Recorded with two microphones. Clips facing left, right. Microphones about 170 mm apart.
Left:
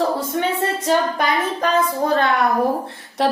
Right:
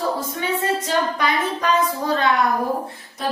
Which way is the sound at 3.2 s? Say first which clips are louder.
Left 6 dB; 75° left (ahead or behind).